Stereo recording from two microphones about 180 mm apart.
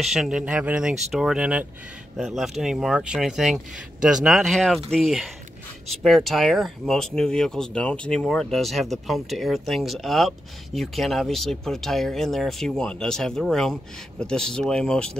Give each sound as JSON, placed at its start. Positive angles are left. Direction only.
{"t": 0.0, "sound": "speech", "side_deg": 0}